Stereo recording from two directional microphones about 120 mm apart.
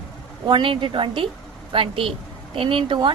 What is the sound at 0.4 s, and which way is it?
A woman's voice, 45° right (ahead or behind).